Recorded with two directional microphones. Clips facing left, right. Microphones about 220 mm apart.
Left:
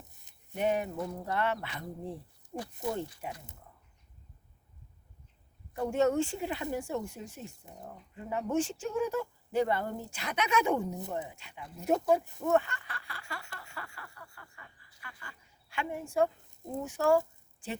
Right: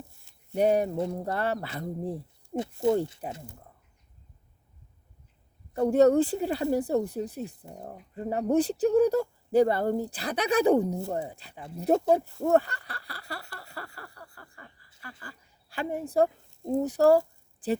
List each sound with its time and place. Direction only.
0.0 s a sound: 20° left (ahead or behind)
0.5 s speech: 40° right (ahead or behind)
2.6 s speech: 25° right (ahead or behind)
5.9 s speech: 35° right (ahead or behind)
13.6 s a sound: 35° right (ahead or behind)
16.6 s speech: 35° right (ahead or behind)